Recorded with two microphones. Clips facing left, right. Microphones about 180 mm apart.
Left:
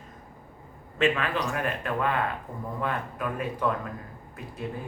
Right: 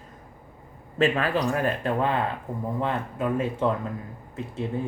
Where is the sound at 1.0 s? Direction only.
35° right (ahead or behind).